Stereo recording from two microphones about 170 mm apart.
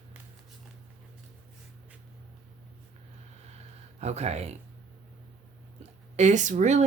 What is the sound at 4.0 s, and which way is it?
Speech, 40° right (ahead or behind).